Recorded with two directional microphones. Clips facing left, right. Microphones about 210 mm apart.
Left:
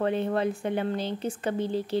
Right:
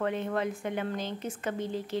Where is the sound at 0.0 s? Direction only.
30° left (ahead or behind).